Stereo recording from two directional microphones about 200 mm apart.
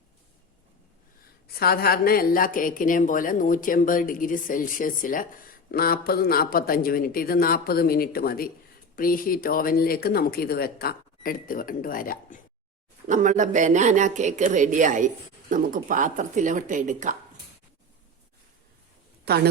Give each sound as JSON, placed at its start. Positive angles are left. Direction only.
{"t": 1.5, "sound": "a woman's voice", "side_deg": 50}
{"t": 13.1, "sound": "speech", "side_deg": -40}
{"t": 19.2, "sound": "speech", "side_deg": -50}